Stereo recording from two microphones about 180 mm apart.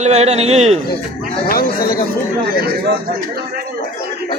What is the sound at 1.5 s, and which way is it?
Speech, 55° left (ahead or behind).